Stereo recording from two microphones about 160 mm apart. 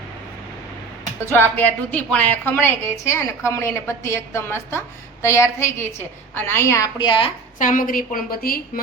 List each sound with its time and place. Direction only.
1.3 s speech: 10° left (ahead or behind)
7.0 s a woman's voice: 30° left (ahead or behind)
7.6 s a woman's voice: 60° left (ahead or behind)